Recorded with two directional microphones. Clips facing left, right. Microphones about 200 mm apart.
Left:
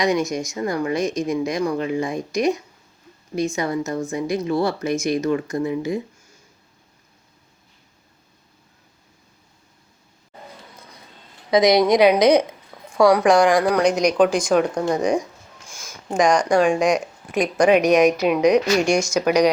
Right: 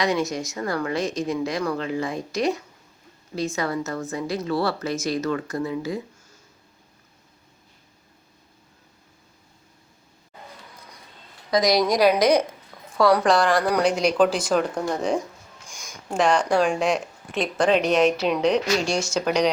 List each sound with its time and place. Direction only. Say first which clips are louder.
0.0 s speech: left 3 dB; 15° left (ahead or behind)
11.5 s a woman's voice: left 5 dB; 20° left (ahead or behind)
12.7 s a sound: left 3 dB; 5° left (ahead or behind)
13.3 s speech: left 5 dB; 15° left (ahead or behind)
13.6 s a woman's voice: left 3 dB; centre (ahead or behind)